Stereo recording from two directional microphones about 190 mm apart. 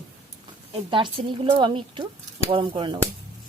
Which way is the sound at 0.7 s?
25° right (ahead or behind).